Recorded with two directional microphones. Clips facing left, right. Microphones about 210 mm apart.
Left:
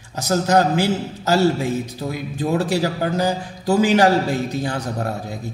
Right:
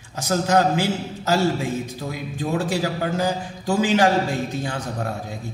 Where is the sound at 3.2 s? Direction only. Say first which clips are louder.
Left 2 dB; 40° left (ahead or behind).